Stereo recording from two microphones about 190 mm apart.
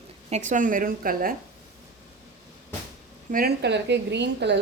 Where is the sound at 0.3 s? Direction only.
40° right (ahead or behind).